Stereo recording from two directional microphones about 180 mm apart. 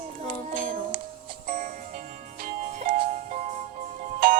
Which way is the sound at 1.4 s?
50° right (ahead or behind).